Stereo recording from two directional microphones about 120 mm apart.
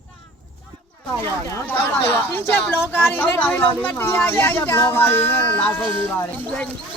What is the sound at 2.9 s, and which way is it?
Speech, 15° left (ahead or behind).